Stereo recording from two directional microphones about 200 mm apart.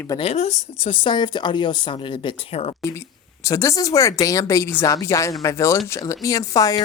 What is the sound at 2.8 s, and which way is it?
Speech, 15° left (ahead or behind).